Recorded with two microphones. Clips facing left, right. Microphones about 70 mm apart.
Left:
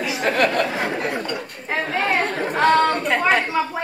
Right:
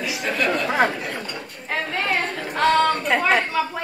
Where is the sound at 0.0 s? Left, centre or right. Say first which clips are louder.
Left 4 dB; left.